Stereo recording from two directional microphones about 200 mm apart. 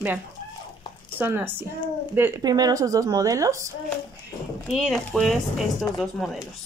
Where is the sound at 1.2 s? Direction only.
10° right (ahead or behind).